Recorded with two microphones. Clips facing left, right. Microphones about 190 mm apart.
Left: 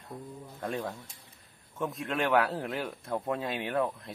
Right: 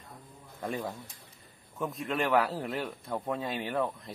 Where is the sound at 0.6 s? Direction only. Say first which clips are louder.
Even; 5° right (ahead or behind).